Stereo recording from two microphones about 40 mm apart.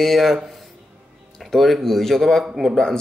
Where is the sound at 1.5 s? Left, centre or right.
Centre.